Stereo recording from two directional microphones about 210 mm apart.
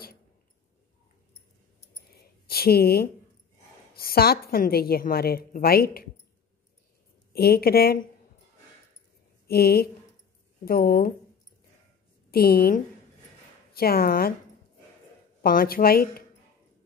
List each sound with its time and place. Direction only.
2.1 s a sound: 45° left (ahead or behind)
3.9 s a woman's voice: 45° left (ahead or behind)
7.3 s a woman's voice: 45° left (ahead or behind)
9.5 s a woman's voice: 45° left (ahead or behind)
12.3 s a woman's voice: 45° left (ahead or behind)
15.4 s a woman's voice: 45° left (ahead or behind)